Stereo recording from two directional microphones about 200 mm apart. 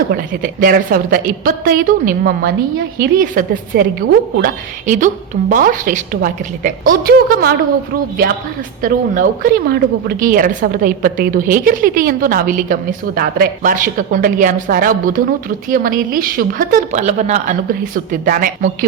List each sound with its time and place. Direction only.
0.1 s a woman's voice: 45° right (ahead or behind)
8.8 s a woman's voice: 45° right (ahead or behind)